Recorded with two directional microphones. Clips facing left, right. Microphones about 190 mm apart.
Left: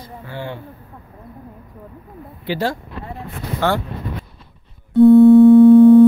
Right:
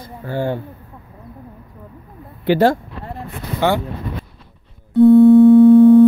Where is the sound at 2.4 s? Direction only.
55° right (ahead or behind).